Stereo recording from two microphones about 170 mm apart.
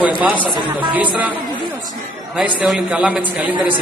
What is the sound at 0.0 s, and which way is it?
Speech, 10° right (ahead or behind).